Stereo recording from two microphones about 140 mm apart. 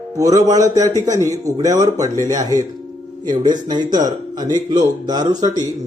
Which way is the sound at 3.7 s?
30° right (ahead or behind).